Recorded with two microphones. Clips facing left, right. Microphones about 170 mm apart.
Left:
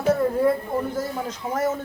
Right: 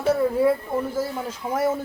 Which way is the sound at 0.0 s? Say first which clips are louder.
Even; 10° right (ahead or behind).